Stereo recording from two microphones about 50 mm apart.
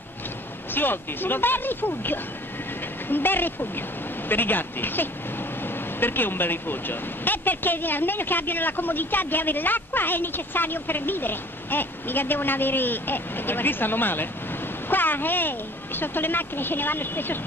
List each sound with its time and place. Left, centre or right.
0.7 s speech: left